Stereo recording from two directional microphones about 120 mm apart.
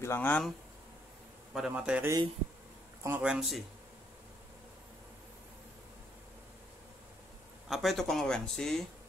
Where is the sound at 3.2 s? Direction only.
5° right (ahead or behind).